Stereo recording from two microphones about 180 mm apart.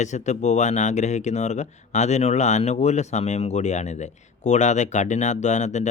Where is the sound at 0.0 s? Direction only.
40° left (ahead or behind).